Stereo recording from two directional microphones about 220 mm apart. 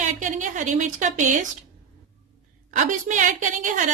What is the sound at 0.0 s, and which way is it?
A woman's voice, 35° right (ahead or behind).